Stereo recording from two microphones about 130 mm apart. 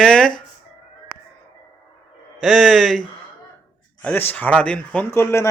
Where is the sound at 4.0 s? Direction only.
15° left (ahead or behind).